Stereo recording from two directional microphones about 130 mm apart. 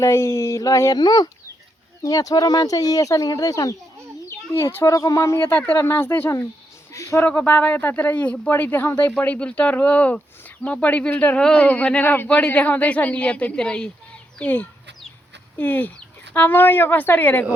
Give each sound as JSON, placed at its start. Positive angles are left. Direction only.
{"t": 0.0, "sound": "speech", "side_deg": 20}
{"t": 7.3, "sound": "a man's voice", "side_deg": 15}